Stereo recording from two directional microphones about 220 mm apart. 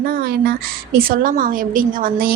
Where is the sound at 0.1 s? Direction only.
45° right (ahead or behind).